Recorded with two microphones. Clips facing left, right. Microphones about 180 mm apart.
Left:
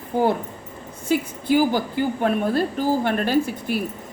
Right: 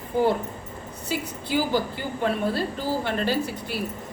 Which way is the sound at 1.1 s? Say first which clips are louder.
Left 7 dB; 50° left (ahead or behind).